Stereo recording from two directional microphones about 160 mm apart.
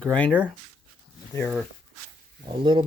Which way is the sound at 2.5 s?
30° right (ahead or behind).